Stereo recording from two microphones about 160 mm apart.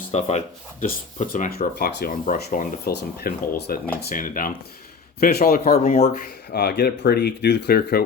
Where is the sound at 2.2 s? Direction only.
60° left (ahead or behind).